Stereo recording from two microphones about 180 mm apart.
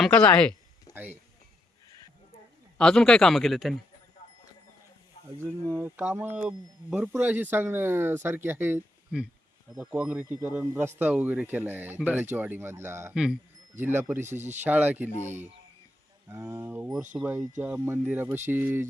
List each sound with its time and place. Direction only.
0.0 s a man's voice: 5° left (ahead or behind)
0.9 s a sound: 20° left (ahead or behind)
2.7 s a man's voice: 5° left (ahead or behind)
5.7 s speech: 10° right (ahead or behind)
13.1 s speech: 5° right (ahead or behind)
16.3 s speech: 15° right (ahead or behind)